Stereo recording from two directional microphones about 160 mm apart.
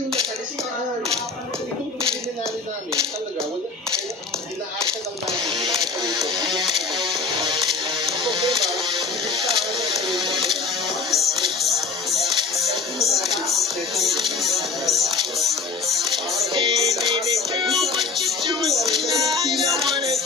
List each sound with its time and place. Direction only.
5.4 s a sound: 30° right (ahead or behind)
6.7 s music: centre (ahead or behind)
9.9 s music: centre (ahead or behind)
10.3 s printer: centre (ahead or behind)
11.1 s music: centre (ahead or behind)
16.6 s music: 30° right (ahead or behind)
17.7 s music: centre (ahead or behind)